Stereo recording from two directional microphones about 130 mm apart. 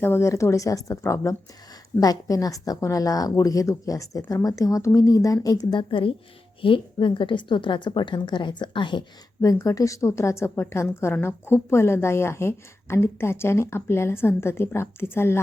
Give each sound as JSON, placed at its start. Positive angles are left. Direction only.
{"t": 0.0, "sound": "a woman's voice", "side_deg": 20}
{"t": 9.4, "sound": "a woman's voice", "side_deg": 25}